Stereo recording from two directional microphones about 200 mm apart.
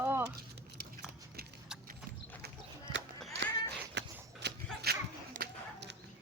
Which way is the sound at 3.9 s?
55° right (ahead or behind).